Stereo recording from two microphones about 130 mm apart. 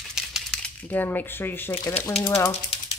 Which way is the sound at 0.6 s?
10° left (ahead or behind).